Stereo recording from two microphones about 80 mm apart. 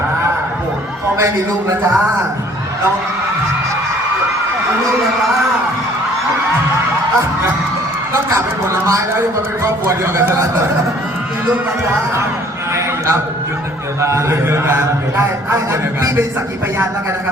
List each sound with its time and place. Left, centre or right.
8.1 s a man's voice: right
12.7 s a sound: right
14.0 s a man's voice: right